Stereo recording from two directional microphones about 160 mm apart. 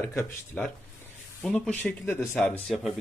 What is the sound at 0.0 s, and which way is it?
Speech, 15° left (ahead or behind).